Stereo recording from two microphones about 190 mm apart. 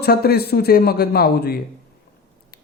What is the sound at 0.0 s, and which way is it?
A man's voice, 55° left (ahead or behind).